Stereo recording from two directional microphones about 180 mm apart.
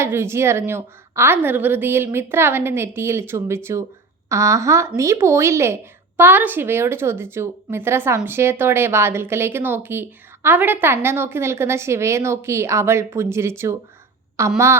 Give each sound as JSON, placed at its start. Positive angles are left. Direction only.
{"t": 0.0, "sound": "a woman's voice", "side_deg": -15}